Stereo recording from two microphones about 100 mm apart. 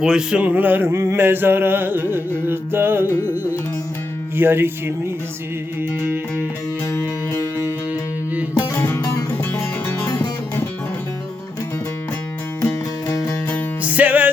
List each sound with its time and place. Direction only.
0.0 s a sound: 5° right (ahead or behind)
4.4 s a sound: 20° right (ahead or behind)
6.9 s music: 30° left (ahead or behind)
8.7 s music: 20° left (ahead or behind)
10.2 s music: 25° left (ahead or behind)
13.1 s music: 35° left (ahead or behind)
13.8 s music: 15° right (ahead or behind)